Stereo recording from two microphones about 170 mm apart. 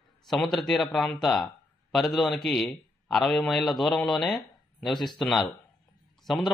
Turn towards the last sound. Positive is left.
turn(degrees=0)  # may be behind; listen again after turning